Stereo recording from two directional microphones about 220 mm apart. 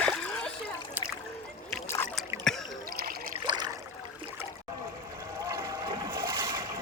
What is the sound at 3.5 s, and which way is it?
Boat, 20° right (ahead or behind).